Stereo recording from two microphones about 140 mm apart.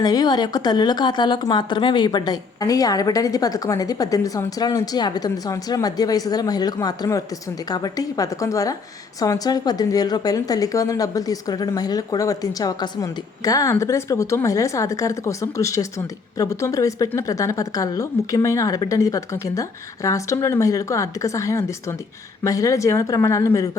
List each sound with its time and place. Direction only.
0.0 s speech: 30° left (ahead or behind)